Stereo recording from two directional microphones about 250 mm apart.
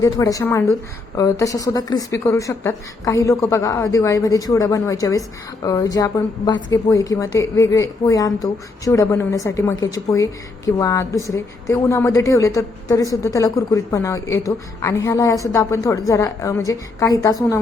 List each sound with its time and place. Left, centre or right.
0.0 s a woman's voice: centre